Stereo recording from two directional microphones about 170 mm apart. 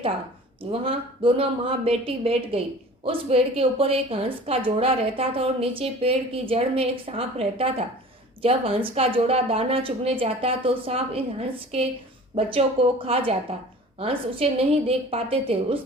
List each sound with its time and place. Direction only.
0.6 s a woman's voice: 30° right (ahead or behind)